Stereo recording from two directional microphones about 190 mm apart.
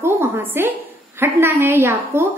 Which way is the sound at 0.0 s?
10° right (ahead or behind).